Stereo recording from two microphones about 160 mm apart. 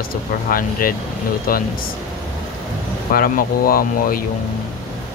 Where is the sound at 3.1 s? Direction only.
65° left (ahead or behind).